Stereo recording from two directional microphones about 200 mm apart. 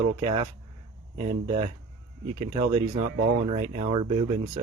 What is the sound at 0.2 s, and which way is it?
Speech, 30° right (ahead or behind).